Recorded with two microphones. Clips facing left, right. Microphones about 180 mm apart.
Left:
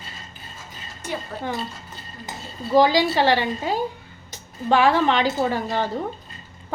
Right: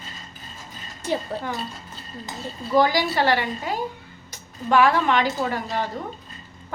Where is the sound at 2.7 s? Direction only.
20° left (ahead or behind).